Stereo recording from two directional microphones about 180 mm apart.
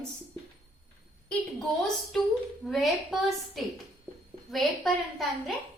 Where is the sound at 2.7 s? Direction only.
Centre (ahead or behind).